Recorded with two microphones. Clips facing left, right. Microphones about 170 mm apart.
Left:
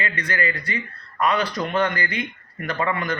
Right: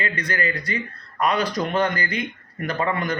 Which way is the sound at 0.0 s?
40° right (ahead or behind).